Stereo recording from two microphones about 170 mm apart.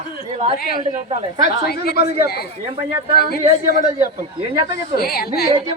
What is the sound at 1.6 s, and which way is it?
Speech, 65° left (ahead or behind).